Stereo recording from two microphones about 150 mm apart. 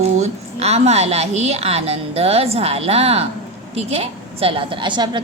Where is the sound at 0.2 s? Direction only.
45° right (ahead or behind).